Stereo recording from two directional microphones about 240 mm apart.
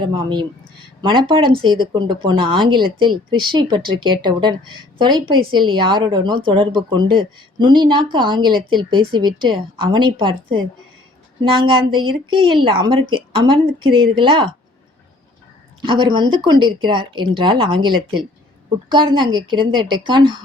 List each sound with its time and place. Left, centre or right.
0.0 s speech: centre
15.8 s speech: centre
18.9 s speech: centre